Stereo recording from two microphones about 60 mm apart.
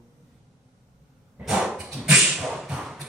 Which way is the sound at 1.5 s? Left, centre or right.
Centre.